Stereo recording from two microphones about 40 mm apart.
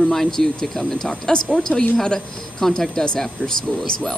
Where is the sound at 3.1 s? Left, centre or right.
Centre.